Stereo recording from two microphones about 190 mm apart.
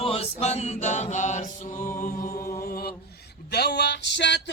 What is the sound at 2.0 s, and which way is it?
Music, 45° left (ahead or behind).